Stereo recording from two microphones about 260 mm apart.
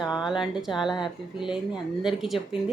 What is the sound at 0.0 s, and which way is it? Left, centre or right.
Speech, centre.